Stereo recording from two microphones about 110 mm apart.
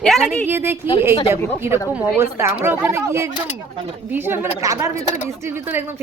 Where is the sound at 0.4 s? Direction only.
20° right (ahead or behind).